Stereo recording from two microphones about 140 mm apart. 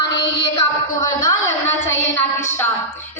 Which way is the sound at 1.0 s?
25° left (ahead or behind).